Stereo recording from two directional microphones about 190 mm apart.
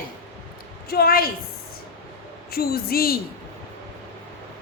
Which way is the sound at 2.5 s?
55° left (ahead or behind).